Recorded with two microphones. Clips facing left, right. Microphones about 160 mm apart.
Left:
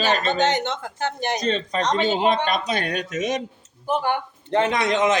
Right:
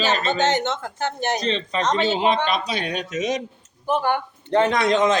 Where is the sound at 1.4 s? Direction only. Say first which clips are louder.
Even; 45° left (ahead or behind).